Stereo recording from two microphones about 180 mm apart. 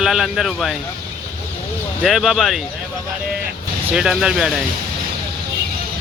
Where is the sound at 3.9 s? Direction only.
5° right (ahead or behind).